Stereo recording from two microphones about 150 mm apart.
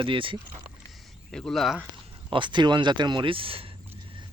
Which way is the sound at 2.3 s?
30° right (ahead or behind).